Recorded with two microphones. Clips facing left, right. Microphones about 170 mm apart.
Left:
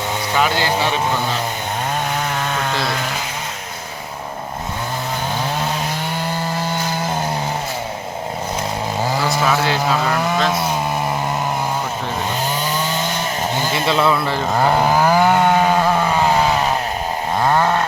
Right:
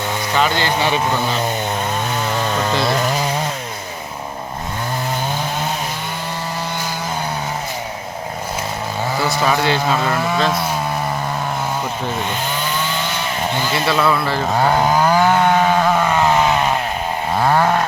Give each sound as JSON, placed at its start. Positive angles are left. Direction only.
{"t": 0.3, "sound": "speech", "side_deg": 5}
{"t": 9.4, "sound": "speech", "side_deg": 0}
{"t": 13.7, "sound": "speech", "side_deg": 20}
{"t": 14.4, "sound": "chainsaw", "side_deg": 5}
{"t": 17.4, "sound": "a sound", "side_deg": -5}